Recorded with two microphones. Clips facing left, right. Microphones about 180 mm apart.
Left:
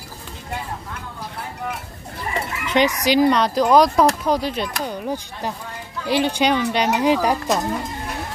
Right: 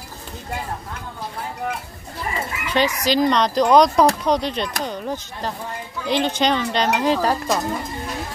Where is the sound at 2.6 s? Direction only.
20° left (ahead or behind).